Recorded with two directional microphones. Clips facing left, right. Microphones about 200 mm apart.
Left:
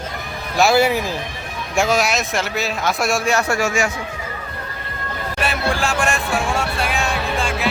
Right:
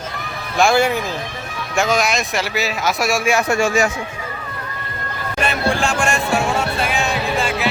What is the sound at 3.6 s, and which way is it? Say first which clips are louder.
Speech: right 3 dB; 35° right (ahead or behind).